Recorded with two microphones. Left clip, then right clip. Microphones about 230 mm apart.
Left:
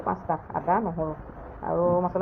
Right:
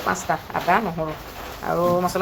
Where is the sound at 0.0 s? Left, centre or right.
Right.